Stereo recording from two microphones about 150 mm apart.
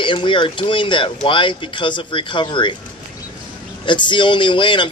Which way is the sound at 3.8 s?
30° left (ahead or behind).